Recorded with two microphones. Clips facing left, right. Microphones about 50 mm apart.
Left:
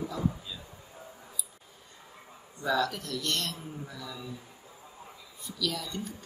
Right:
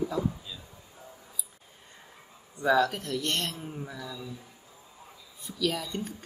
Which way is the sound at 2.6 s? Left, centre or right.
Right.